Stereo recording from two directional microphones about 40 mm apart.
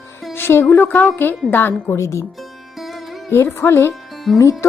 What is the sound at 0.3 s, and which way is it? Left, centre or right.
Music, left.